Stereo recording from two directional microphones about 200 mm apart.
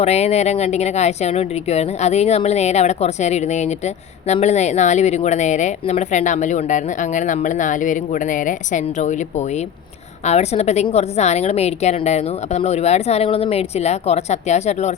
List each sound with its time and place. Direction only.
0.0 s a woman's voice: 35° left (ahead or behind)